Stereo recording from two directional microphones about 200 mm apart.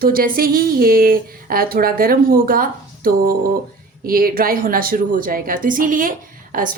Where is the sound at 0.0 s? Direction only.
45° right (ahead or behind).